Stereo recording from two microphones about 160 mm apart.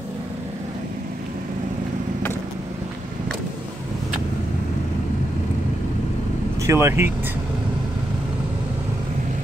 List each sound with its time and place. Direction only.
6.6 s speech: 15° right (ahead or behind)